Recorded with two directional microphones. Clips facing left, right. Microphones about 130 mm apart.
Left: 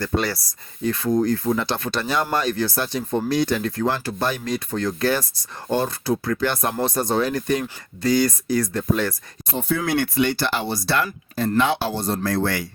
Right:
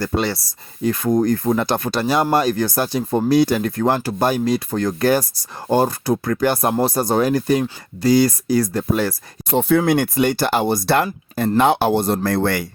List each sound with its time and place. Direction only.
0.9 s speech: 45° right (ahead or behind)
9.5 s speech: 65° right (ahead or behind)